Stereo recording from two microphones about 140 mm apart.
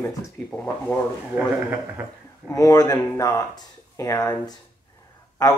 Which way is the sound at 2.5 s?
25° left (ahead or behind).